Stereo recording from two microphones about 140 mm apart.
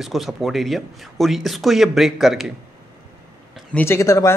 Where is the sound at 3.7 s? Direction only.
15° left (ahead or behind).